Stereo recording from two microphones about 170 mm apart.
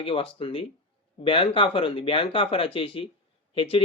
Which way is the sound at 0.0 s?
30° left (ahead or behind).